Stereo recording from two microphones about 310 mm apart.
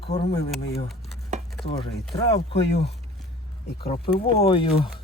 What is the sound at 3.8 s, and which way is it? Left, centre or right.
Speech, centre.